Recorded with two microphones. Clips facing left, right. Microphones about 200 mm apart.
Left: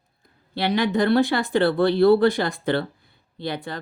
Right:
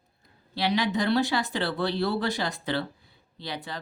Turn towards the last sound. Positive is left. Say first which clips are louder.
# left 7 dB
turn(degrees=55)  # may be behind; listen again after turning